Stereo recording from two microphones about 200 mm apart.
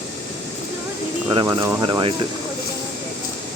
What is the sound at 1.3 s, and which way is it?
Speech, 20° right (ahead or behind).